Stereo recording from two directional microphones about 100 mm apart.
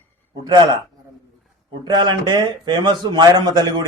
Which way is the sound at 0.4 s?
45° right (ahead or behind).